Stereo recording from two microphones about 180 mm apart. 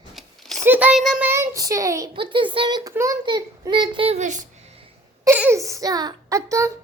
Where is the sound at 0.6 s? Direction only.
10° right (ahead or behind); by 4.5 s 45° right (ahead or behind).